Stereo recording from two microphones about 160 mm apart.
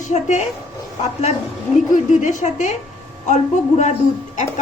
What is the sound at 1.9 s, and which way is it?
Speech, 50° left (ahead or behind).